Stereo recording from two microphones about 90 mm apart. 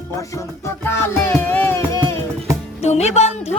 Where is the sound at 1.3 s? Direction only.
20° left (ahead or behind).